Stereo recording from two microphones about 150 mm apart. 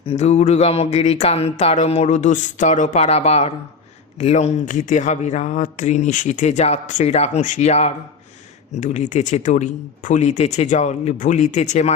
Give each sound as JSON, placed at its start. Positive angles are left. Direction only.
{"t": 0.0, "sound": "speech", "side_deg": 45}